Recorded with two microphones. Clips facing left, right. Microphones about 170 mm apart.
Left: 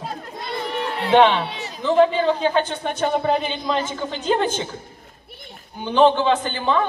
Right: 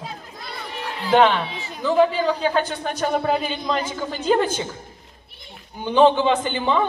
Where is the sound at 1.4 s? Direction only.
70° left (ahead or behind).